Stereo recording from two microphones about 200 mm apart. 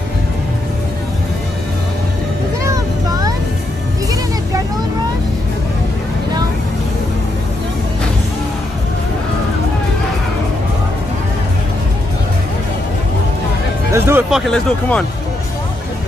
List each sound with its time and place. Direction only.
2.6 s vehicle: 15° right (ahead or behind)
13.9 s music: 10° right (ahead or behind)
14.3 s speech: centre (ahead or behind)